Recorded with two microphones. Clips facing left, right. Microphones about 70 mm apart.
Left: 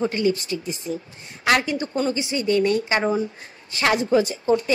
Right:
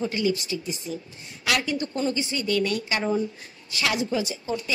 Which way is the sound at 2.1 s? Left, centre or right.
Left.